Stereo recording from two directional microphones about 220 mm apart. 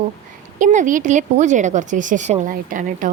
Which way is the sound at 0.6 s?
35° right (ahead or behind).